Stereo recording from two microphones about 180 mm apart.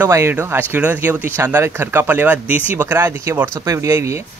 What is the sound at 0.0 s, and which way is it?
Speech, 15° right (ahead or behind).